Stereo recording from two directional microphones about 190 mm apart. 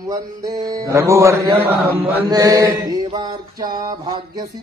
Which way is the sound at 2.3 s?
20° right (ahead or behind).